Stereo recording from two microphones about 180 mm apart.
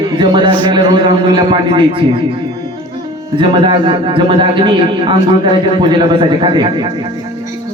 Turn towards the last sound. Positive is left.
turn(degrees=-25)  # may be behind; listen again after turning